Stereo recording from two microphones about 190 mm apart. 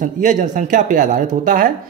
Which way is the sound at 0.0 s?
40° right (ahead or behind).